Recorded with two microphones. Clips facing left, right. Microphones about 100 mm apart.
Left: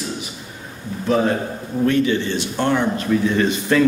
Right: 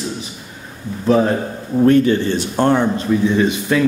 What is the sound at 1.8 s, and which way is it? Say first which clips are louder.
Speech: right 5 dB; 40° right (ahead or behind).